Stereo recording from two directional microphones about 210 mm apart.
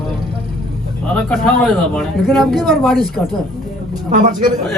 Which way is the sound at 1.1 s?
5° left (ahead or behind).